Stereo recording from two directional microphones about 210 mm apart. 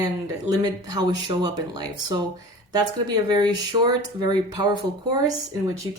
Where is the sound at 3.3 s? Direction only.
20° right (ahead or behind).